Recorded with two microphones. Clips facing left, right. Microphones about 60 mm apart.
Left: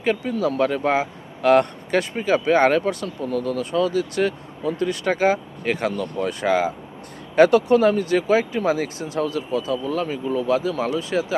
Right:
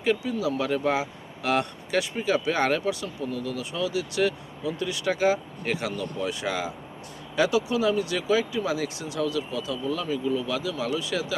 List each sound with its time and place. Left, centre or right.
0.0 s speech: left